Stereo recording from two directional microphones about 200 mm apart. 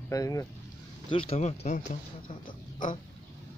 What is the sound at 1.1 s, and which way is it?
Speech, 30° left (ahead or behind).